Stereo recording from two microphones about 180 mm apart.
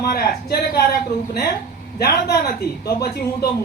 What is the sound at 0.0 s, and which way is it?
Speech, 60° left (ahead or behind).